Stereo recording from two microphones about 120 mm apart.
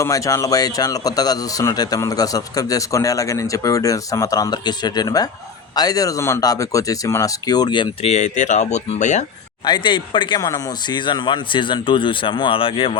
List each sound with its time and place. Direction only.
0.0 s speech: 25° left (ahead or behind)
8.0 s speech: 80° left
9.6 s speech: 40° left (ahead or behind)